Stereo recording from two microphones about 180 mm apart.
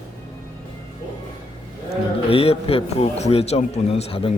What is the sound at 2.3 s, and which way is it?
Speech, 35° left (ahead or behind).